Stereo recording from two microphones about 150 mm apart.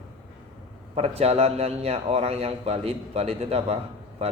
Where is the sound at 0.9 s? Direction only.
45° right (ahead or behind).